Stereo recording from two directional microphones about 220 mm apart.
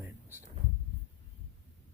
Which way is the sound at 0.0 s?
10° right (ahead or behind).